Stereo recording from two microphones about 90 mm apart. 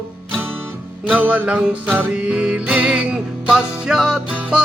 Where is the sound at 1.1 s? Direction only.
15° right (ahead or behind).